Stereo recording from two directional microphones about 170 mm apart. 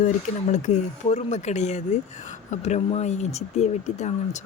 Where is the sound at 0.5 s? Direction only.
45° left (ahead or behind).